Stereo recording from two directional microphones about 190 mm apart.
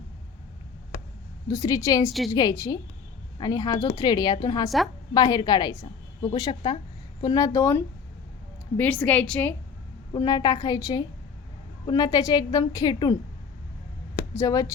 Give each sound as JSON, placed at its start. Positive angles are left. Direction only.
{"t": 1.5, "sound": "a woman's voice", "side_deg": 15}
{"t": 8.8, "sound": "a woman's voice", "side_deg": 5}
{"t": 10.1, "sound": "a woman's voice", "side_deg": 25}
{"t": 14.3, "sound": "a woman's voice", "side_deg": 15}